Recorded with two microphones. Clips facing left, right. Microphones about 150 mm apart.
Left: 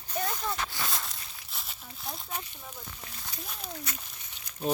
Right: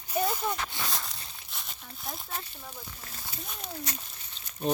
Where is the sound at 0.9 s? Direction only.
Centre (ahead or behind).